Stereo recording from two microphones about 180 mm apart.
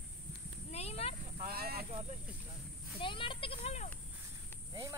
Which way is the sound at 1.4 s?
60° right (ahead or behind).